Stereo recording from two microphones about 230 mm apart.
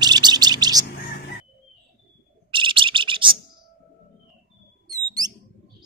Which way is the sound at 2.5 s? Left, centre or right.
Right.